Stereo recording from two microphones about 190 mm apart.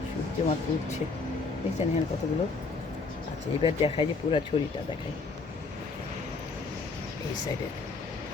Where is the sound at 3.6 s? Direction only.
30° left (ahead or behind).